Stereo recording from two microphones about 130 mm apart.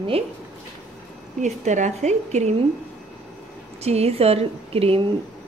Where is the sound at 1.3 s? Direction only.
70° right (ahead or behind).